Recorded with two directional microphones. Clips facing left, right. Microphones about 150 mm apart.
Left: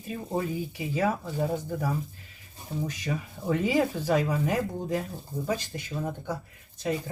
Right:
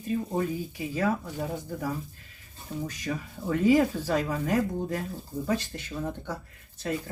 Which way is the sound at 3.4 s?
20° left (ahead or behind).